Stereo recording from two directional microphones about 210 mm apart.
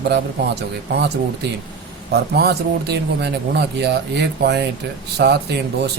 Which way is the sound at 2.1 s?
50° right (ahead or behind).